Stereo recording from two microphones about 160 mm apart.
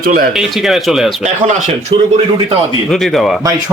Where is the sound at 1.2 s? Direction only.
50° right (ahead or behind).